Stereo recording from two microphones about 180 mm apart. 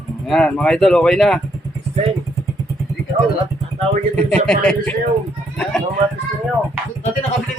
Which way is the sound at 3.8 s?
40° right (ahead or behind).